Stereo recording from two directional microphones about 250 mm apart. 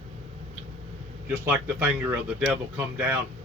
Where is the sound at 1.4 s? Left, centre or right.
Centre.